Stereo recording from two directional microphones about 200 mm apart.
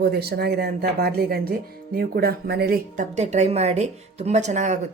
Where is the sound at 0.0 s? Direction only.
50° right (ahead or behind).